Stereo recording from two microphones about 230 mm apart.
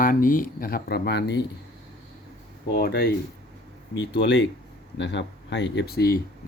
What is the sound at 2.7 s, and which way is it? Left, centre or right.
Speech, left.